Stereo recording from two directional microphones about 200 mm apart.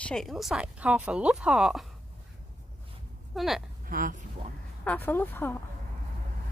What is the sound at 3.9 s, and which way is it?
Speech, 40° right (ahead or behind).